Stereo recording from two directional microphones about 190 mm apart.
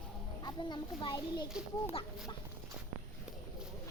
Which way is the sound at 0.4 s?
20° left (ahead or behind).